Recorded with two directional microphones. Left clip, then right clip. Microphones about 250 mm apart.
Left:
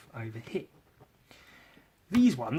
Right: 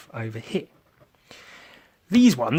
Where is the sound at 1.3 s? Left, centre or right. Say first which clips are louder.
Right 10 dB; right.